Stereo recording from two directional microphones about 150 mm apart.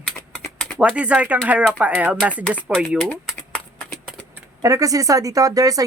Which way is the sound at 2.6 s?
5° right (ahead or behind).